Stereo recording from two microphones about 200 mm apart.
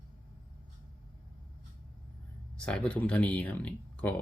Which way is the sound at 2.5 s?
5° left (ahead or behind).